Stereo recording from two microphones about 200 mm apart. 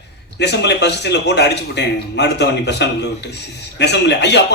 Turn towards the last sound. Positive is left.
turn(degrees=60)  # may be behind; listen again after turning